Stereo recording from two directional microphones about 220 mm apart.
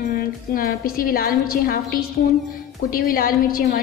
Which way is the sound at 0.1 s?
40° left (ahead or behind).